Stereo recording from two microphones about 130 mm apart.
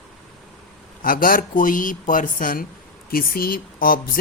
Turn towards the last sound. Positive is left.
turn(degrees=90)